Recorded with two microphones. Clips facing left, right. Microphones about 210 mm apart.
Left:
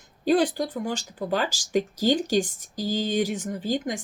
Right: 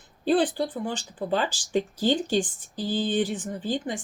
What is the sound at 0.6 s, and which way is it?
Speech, 40° left (ahead or behind).